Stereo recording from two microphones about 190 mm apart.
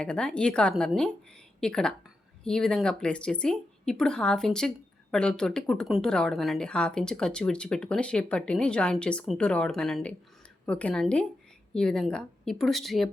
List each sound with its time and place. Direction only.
0.0 s a woman's voice: 5° left (ahead or behind)